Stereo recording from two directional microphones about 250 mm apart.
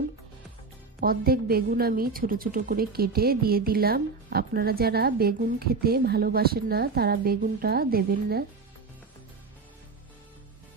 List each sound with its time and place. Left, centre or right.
1.0 s a woman's voice: right